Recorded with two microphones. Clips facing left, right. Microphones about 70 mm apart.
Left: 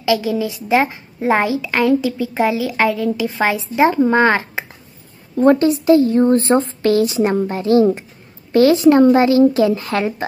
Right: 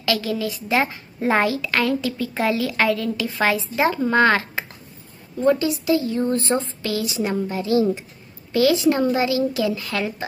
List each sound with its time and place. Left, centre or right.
0.0 s a woman's voice: centre
5.4 s a woman's voice: left